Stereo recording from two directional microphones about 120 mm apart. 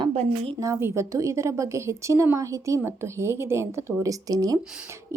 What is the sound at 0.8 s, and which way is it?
A woman's voice, 25° right (ahead or behind).